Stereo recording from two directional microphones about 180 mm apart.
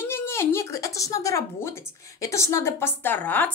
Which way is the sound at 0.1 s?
15° left (ahead or behind).